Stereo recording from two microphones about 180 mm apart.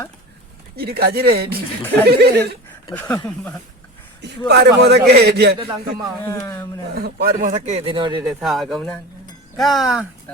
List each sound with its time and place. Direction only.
0.8 s speech: 60° right (ahead or behind)
2.9 s speech: 10° left (ahead or behind)
4.2 s a man's voice: 70° right (ahead or behind)
5.5 s speech: 25° right (ahead or behind)
6.2 s speech: 15° left (ahead or behind)
6.9 s speech: 55° right (ahead or behind)
7.5 s speech: 40° right (ahead or behind)
8.3 s speech: 5° right (ahead or behind)